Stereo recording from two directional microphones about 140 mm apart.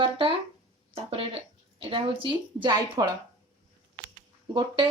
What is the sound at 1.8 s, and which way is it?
A woman's voice, 40° right (ahead or behind).